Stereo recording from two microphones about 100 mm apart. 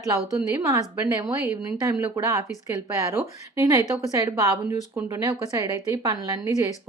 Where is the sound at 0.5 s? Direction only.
30° right (ahead or behind).